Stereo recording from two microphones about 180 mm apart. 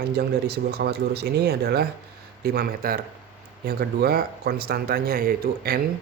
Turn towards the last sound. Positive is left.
turn(degrees=-55)  # may be behind; listen again after turning